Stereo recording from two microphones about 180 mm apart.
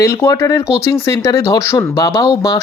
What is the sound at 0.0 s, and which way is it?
Speech, 15° left (ahead or behind).